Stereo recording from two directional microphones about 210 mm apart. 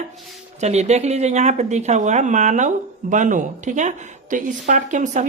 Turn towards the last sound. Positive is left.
turn(degrees=-35)  # may be behind; listen again after turning